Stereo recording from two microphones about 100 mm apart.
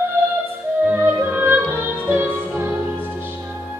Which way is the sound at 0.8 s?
20° right (ahead or behind).